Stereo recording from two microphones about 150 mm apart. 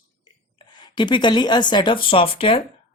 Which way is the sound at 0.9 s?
30° left (ahead or behind).